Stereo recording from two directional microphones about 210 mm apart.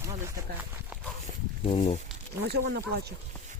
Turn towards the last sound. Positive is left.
turn(degrees=-50)  # may be behind; listen again after turning